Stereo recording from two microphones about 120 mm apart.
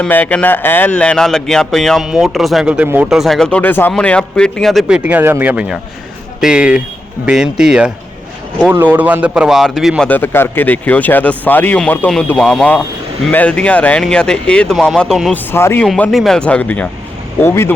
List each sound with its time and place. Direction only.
0.0 s speech: 15° left (ahead or behind); by 3.1 s 15° right (ahead or behind)
3.1 s speech: centre (ahead or behind)
8.7 s speech: 15° right (ahead or behind); by 9.9 s centre (ahead or behind)
10.0 s speech: 15° left (ahead or behind)
15.5 s speech: 20° left (ahead or behind)
15.8 s speech: 5° left (ahead or behind); by 17.7 s 20° left (ahead or behind)